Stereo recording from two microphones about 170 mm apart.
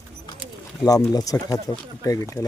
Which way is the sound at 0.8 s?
20° left (ahead or behind).